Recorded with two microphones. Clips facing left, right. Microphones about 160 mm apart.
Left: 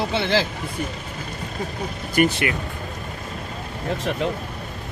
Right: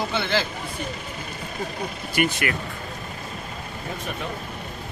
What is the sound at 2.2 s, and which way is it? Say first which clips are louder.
Speech: left 5 dB; 40° left (ahead or behind).